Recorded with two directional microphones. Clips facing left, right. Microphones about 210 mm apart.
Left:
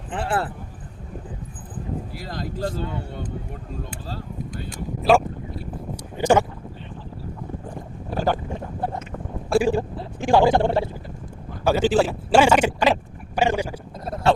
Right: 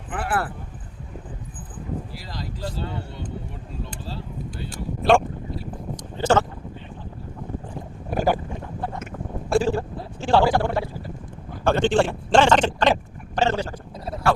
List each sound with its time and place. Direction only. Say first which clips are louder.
0.1 s speech: left 1 dB; 25° left (ahead or behind)
2.1 s speech: left 5 dB; 50° left (ahead or behind)
4.7 s speech: even; centre (ahead or behind)
6.0 s a sound: left 2 dB; 15° left (ahead or behind)
8.1 s boat: right 1 dB; 10° right (ahead or behind)
9.5 s speech: left 2 dB; 10° left (ahead or behind)
11.6 s speech: left 1 dB; 5° left (ahead or behind)
13.3 s a sound: left 1 dB; 10° left (ahead or behind)
14.3 s a sound: left 2 dB; 25° left (ahead or behind)